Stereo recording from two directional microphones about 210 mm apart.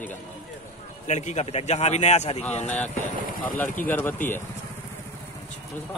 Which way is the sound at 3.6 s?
10° left (ahead or behind).